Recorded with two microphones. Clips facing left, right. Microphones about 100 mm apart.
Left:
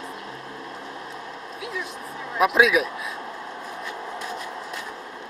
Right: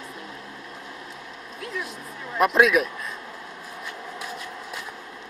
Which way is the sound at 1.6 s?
Centre (ahead or behind).